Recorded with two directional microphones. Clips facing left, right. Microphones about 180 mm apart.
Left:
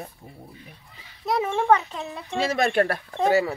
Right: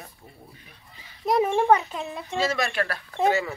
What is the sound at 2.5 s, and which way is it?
Speech, 55° left (ahead or behind).